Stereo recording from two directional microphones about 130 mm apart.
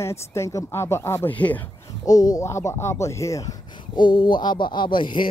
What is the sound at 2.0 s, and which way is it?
Speech, 30° left (ahead or behind).